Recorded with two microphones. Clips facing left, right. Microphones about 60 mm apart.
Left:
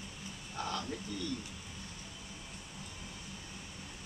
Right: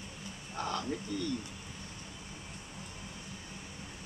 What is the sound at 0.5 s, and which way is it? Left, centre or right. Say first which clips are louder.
Speech: right 3 dB; right.